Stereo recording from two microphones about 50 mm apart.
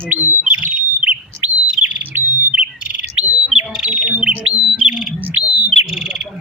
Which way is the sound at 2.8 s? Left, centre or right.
Right.